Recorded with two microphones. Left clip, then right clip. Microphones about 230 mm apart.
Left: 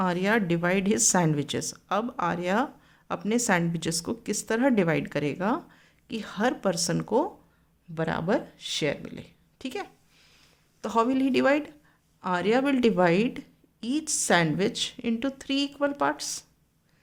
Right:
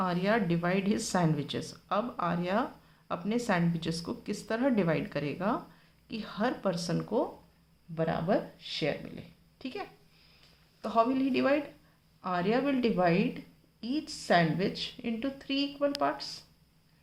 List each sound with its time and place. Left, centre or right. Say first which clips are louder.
0.0 s speech: left 4 dB; left